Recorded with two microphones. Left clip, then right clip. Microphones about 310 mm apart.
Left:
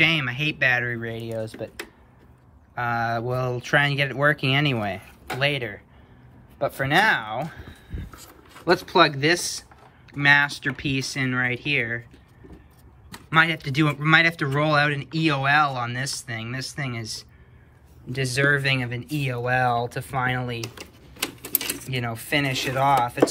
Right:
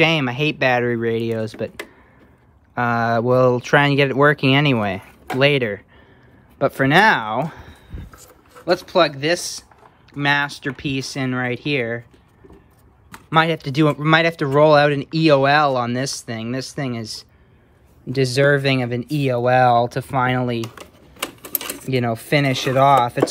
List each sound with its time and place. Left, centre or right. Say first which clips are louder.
0.0 s speech: right 4 dB; centre
2.7 s speech: right 6 dB; centre
8.1 s speech: right 1 dB; centre
13.3 s speech: right 3 dB; centre
21.2 s typewriter: right 2 dB; centre
21.8 s speech: right 8 dB; centre